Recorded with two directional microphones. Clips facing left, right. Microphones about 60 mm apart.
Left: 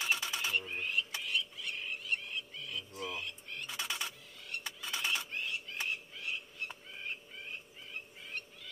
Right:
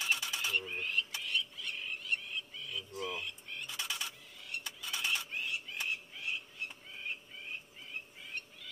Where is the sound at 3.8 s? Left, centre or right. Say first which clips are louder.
Left 2 dB; left.